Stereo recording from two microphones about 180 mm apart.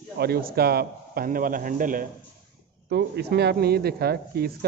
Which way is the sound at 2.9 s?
65° right (ahead or behind).